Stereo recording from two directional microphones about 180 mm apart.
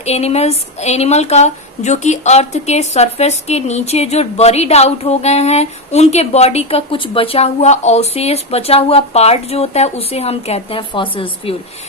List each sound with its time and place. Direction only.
0.0 s a woman's voice: 35° left (ahead or behind)